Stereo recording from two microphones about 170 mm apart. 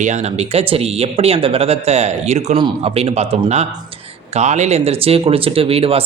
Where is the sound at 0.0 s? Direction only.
40° right (ahead or behind).